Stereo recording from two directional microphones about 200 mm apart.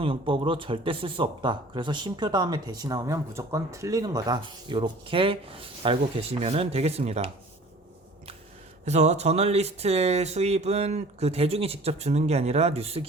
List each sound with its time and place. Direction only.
0.0 s speech: 25° right (ahead or behind)
8.8 s speech: 35° right (ahead or behind)